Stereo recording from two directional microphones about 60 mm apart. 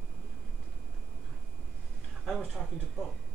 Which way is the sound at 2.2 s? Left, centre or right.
Centre.